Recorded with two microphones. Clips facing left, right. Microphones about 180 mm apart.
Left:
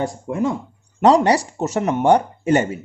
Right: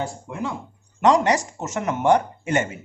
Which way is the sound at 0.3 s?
45° left (ahead or behind).